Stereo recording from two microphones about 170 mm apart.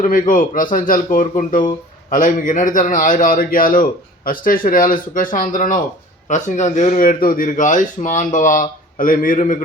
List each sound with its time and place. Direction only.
0.0 s speech: 50° left (ahead or behind)